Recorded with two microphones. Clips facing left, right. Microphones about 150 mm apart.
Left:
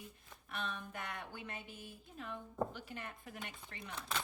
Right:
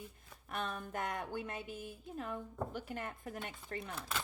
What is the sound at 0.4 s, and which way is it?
Speech, 45° right (ahead or behind).